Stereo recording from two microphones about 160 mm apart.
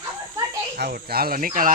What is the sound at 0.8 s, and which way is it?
Speech, 75° right (ahead or behind).